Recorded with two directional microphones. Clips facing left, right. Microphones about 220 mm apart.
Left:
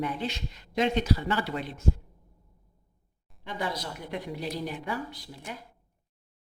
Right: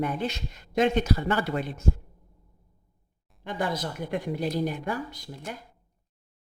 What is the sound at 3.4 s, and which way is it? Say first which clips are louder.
Speech: right 4 dB; 50° right (ahead or behind).